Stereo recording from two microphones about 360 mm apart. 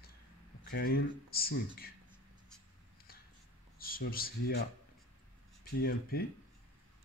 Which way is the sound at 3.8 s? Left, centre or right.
Left.